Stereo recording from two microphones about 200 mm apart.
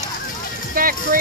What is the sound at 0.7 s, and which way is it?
Speech, 45° right (ahead or behind).